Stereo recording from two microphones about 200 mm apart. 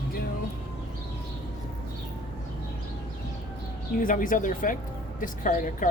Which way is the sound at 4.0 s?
40° left (ahead or behind).